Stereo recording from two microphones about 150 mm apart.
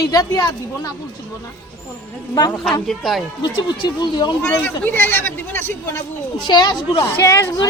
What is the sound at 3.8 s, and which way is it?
Speech, 30° left (ahead or behind).